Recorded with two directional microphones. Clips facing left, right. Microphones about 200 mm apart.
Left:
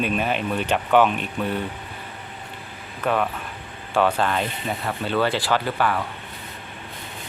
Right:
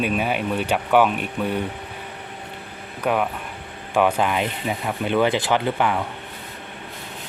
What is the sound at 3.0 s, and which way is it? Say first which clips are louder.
Speech: right 1 dB; 10° right (ahead or behind).